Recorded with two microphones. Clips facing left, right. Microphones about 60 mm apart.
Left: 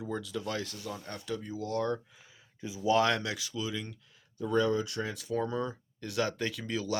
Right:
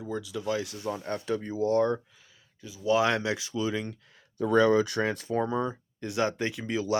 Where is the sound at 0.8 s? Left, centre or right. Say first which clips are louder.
Right 8 dB; right.